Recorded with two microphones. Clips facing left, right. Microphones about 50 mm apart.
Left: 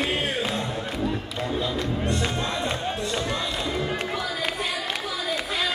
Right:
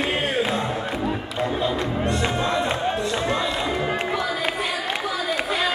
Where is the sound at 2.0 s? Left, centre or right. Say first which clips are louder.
Right 4 dB; centre.